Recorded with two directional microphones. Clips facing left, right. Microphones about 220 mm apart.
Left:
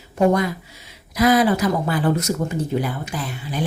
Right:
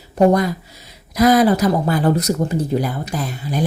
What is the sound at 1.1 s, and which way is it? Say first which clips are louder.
Speech: right 3 dB; 40° right (ahead or behind).